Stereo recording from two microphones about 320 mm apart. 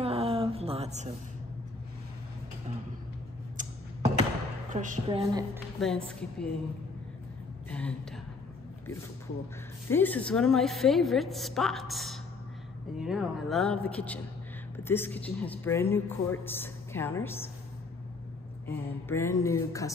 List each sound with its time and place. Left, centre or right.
0.0 s a sound: centre
3.5 s a sound: right
5.8 s a woman's voice: centre
7.7 s a woman's voice: centre
9.8 s a woman's voice: centre
19.0 s a woman's voice: centre